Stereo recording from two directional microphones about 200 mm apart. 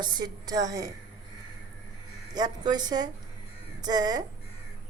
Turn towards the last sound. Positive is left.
turn(degrees=-20)  # may be behind; listen again after turning